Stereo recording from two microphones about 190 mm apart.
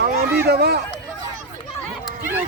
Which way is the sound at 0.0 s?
55° right (ahead or behind).